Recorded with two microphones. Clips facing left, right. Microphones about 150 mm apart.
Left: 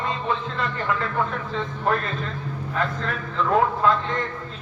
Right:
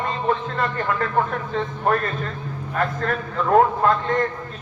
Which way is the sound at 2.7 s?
50° right (ahead or behind).